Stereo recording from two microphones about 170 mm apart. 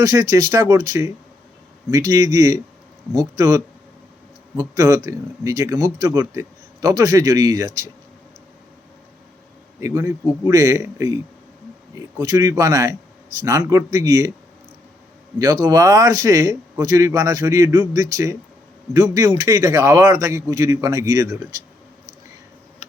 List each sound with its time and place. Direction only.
0.0 s a man's voice: 20° right (ahead or behind)
4.7 s a man's voice: 20° right (ahead or behind)
9.8 s a man's voice: 15° right (ahead or behind)
15.6 s a man's voice: 20° right (ahead or behind)